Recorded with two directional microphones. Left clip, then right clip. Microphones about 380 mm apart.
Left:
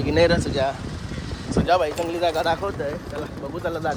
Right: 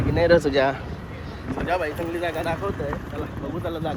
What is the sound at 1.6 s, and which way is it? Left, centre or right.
Speech, centre.